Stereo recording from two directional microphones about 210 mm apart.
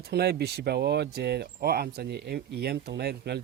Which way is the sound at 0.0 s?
50° right (ahead or behind).